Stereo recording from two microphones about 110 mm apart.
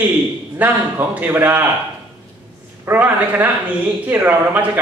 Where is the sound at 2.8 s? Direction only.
15° right (ahead or behind).